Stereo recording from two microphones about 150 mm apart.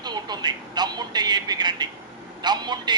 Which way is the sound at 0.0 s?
30° right (ahead or behind).